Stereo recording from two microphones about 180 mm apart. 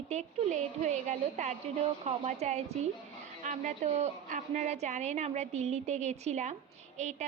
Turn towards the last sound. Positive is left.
turn(degrees=-40)  # may be behind; listen again after turning